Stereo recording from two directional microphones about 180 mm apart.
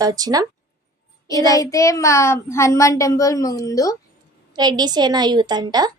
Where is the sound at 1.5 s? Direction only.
20° left (ahead or behind).